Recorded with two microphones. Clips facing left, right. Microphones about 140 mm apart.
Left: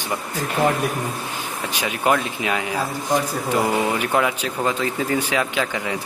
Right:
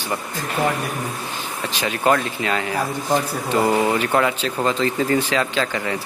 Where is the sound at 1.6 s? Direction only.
10° left (ahead or behind).